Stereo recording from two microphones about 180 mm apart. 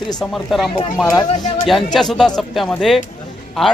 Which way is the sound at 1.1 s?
20° left (ahead or behind).